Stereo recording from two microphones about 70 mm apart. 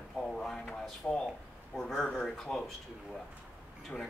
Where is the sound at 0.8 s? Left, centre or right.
Centre.